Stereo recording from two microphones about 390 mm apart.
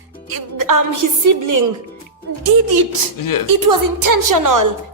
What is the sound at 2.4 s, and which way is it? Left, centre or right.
A child's voice, right.